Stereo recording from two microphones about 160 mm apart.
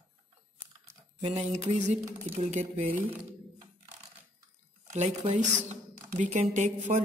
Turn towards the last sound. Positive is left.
turn(degrees=-50)  # may be behind; listen again after turning